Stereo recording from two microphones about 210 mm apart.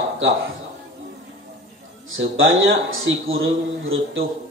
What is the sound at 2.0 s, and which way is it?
A man's voice, 70° right (ahead or behind).